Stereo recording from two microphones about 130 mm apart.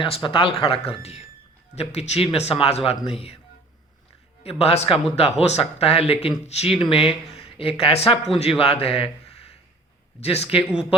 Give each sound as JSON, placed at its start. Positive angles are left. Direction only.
{"t": 0.0, "sound": "speech", "side_deg": 40}
{"t": 4.4, "sound": "speech", "side_deg": 50}